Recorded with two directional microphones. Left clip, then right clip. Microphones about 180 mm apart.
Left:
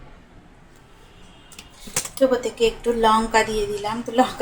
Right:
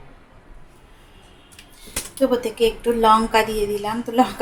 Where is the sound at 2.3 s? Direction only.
10° right (ahead or behind).